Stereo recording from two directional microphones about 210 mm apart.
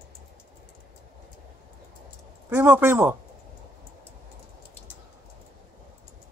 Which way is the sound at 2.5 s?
10° right (ahead or behind).